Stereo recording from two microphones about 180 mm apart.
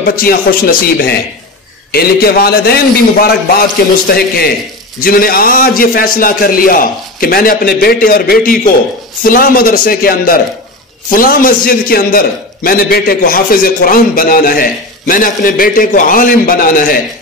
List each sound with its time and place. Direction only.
0.0 s a man's voice: 55° left (ahead or behind)